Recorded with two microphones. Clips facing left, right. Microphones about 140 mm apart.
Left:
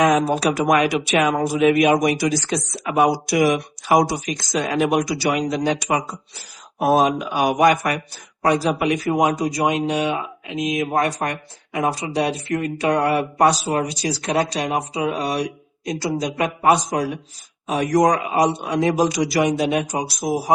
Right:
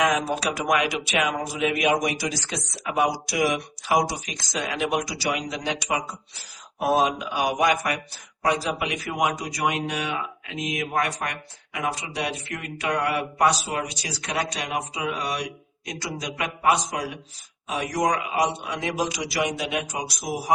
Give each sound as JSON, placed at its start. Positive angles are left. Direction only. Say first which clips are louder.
{"t": 0.0, "sound": "speech", "louder": "left 6 dB", "side_deg": 35}
{"t": 0.3, "sound": "speech", "louder": "left 6 dB", "side_deg": 50}